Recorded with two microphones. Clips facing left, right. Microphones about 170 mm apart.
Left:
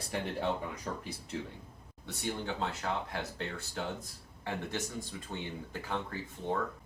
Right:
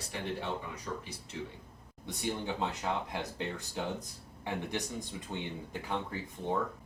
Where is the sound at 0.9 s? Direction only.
45° left (ahead or behind).